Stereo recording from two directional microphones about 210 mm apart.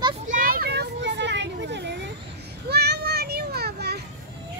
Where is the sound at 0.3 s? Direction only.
40° right (ahead or behind).